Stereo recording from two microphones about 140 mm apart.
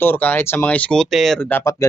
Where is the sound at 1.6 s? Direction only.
20° left (ahead or behind).